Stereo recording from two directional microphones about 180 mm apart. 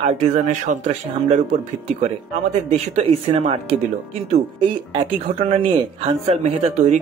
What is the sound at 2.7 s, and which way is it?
Speech, 35° right (ahead or behind).